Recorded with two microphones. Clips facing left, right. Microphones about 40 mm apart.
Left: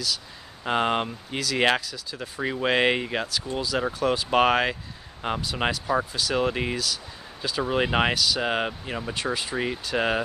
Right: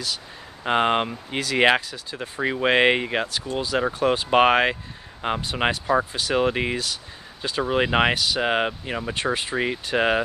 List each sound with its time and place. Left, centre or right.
0.7 s speech: right